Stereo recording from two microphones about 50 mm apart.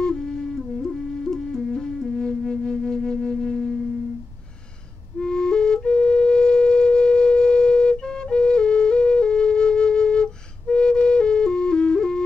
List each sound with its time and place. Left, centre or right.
0.0 s flute: centre
5.2 s flute: centre